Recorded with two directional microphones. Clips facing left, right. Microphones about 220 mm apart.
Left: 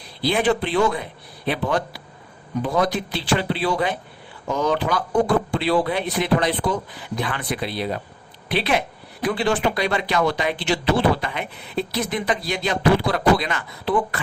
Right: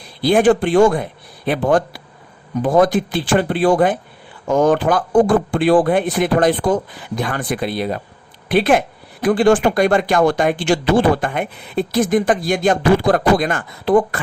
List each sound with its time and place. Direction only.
0.2 s speech: 45° right (ahead or behind)